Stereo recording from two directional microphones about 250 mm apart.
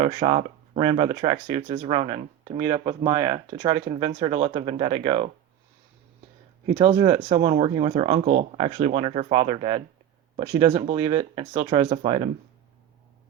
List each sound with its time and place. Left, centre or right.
0.0 s speech: centre
6.7 s speech: right